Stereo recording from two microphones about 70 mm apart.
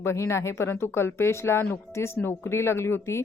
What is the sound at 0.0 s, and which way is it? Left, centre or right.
A woman's voice, left.